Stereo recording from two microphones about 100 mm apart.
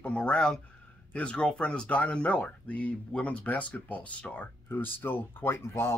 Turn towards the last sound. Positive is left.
turn(degrees=25)  # may be behind; listen again after turning